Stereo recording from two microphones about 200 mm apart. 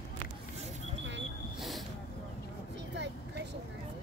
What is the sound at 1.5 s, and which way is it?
Vehicle, centre (ahead or behind).